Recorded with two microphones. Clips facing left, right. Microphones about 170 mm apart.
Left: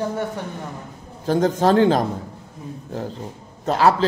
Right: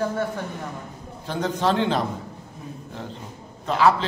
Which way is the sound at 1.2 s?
40° left (ahead or behind).